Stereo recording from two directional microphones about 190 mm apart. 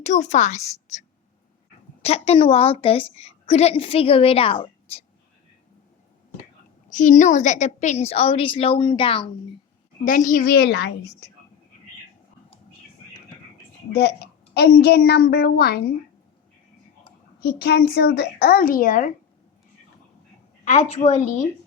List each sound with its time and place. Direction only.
0.0 s a woman's voice: 40° left (ahead or behind)
6.9 s a woman's voice: 40° left (ahead or behind)
10.0 s a woman's voice: 45° left (ahead or behind); by 10.9 s 65° left (ahead or behind)
13.9 s a woman's voice: 60° left (ahead or behind)
17.4 s a woman's voice: 55° left (ahead or behind)
20.9 s a woman's voice: 35° left (ahead or behind)